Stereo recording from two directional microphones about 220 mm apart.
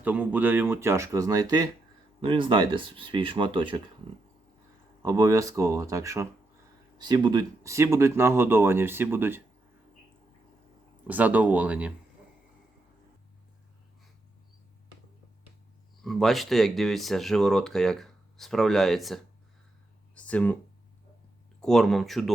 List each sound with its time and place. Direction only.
0.0 s speech: 5° right (ahead or behind); by 3.8 s 20° right (ahead or behind)
5.0 s speech: 15° right (ahead or behind)
11.0 s speech: 5° right (ahead or behind)
16.0 s speech: centre (ahead or behind)
20.1 s a sound: 5° left (ahead or behind)
21.6 s speech: centre (ahead or behind)